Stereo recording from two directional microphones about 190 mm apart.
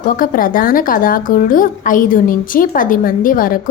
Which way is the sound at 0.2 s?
45° left (ahead or behind).